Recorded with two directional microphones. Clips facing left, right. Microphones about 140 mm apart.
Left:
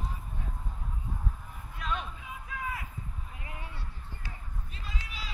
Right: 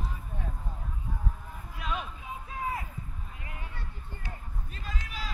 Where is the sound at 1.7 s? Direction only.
5° right (ahead or behind).